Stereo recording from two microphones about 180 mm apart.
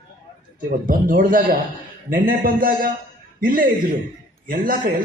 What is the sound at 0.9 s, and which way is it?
A man's voice, 50° right (ahead or behind).